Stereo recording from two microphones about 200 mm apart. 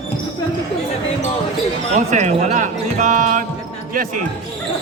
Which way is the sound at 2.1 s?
35° right (ahead or behind).